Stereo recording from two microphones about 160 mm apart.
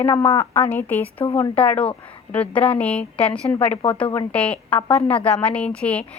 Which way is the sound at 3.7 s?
35° left (ahead or behind).